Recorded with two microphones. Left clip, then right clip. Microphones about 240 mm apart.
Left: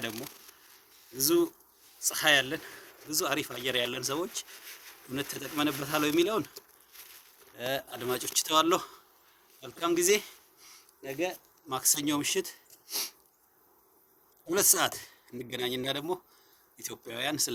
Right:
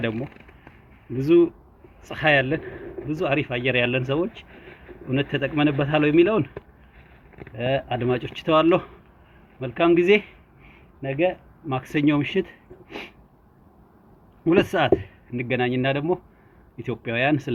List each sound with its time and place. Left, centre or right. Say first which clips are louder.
0.1 s speech: right 9 dB; centre
1.2 s speech: right 9 dB; left
3.1 s speech: right 7 dB; left
7.5 s speech: right 10 dB; left
14.5 s speech: right 9 dB; left